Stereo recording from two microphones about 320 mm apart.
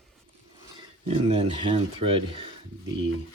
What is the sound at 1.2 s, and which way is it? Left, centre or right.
Speech, centre.